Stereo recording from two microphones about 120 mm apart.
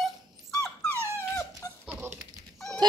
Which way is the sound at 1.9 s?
20° right (ahead or behind).